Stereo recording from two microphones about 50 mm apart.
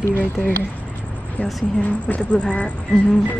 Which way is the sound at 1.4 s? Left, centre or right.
Left.